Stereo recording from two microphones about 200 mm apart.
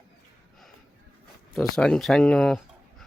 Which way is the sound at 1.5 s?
5° left (ahead or behind).